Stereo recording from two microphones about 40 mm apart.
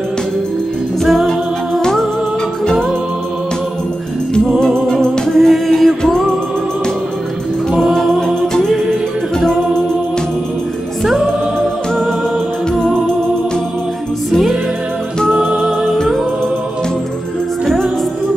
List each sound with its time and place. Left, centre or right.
1.0 s music: centre
1.8 s music: centre
4.6 s music: centre
7.9 s music: centre
12.7 s music: centre